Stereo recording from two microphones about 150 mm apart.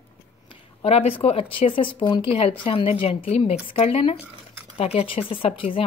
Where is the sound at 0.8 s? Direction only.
45° left (ahead or behind).